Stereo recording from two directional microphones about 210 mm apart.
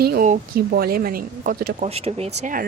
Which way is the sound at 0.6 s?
50° right (ahead or behind).